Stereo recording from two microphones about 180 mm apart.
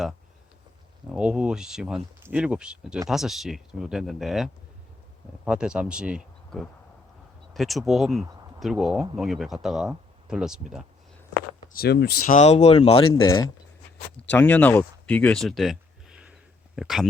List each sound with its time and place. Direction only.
1.1 s speech: 5° right (ahead or behind)
11.7 s speech: 60° left (ahead or behind); by 13.1 s 30° left (ahead or behind)
13.2 s speech: 20° left (ahead or behind)
14.3 s speech: 10° left (ahead or behind)